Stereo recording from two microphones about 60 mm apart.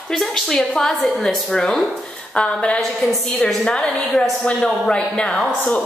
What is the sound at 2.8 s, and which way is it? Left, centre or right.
A woman's voice, centre.